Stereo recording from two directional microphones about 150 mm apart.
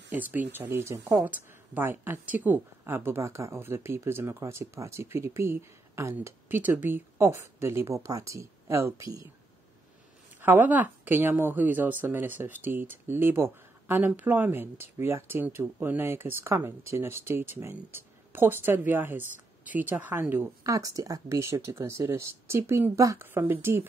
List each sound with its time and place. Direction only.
0.1 s speech: 10° right (ahead or behind)
10.4 s speech: 15° right (ahead or behind)